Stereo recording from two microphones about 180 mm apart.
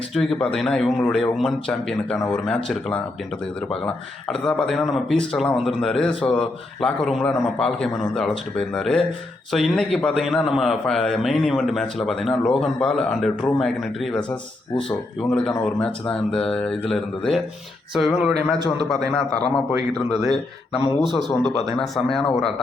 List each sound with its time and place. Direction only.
0.1 s a man's voice: centre (ahead or behind)
3.8 s a man's voice: 5° left (ahead or behind)
19.5 s a man's voice: 5° left (ahead or behind)